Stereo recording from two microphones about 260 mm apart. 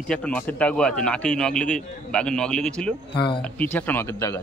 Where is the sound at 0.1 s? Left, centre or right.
Centre.